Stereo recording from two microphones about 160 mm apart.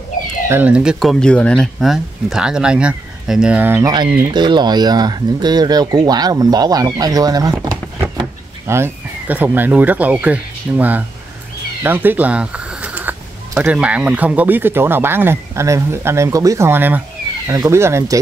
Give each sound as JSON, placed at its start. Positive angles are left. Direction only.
{"t": 0.5, "sound": "speech", "side_deg": -10}
{"t": 4.3, "sound": "speech", "side_deg": -25}
{"t": 7.5, "sound": "a sound", "side_deg": -15}
{"t": 8.6, "sound": "speech", "side_deg": -15}
{"t": 11.8, "sound": "a sound", "side_deg": -10}
{"t": 13.6, "sound": "speech", "side_deg": -5}